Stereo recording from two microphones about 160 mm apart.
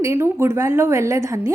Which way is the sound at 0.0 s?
15° right (ahead or behind).